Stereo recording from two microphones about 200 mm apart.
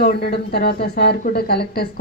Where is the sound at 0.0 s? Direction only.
50° left (ahead or behind).